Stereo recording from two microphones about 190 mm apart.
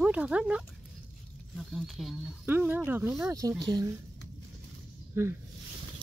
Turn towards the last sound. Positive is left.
turn(degrees=-15)  # may be behind; listen again after turning